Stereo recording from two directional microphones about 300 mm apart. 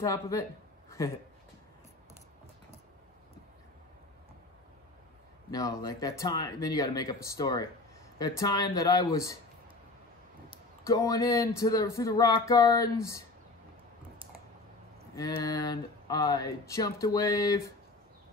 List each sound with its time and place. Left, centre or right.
0.0 s speech: centre
5.5 s speech: centre
10.9 s speech: centre
15.1 s speech: centre